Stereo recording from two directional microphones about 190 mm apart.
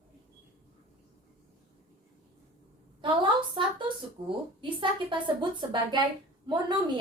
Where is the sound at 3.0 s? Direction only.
25° right (ahead or behind).